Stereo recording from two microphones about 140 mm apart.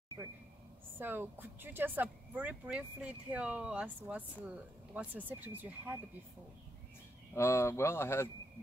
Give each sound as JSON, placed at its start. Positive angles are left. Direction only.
{"t": 0.2, "sound": "a sound", "side_deg": -15}
{"t": 0.9, "sound": "speech", "side_deg": -15}
{"t": 7.3, "sound": "speech", "side_deg": 20}